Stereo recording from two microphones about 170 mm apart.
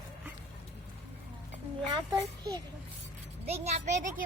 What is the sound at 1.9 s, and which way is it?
Speech, 20° right (ahead or behind).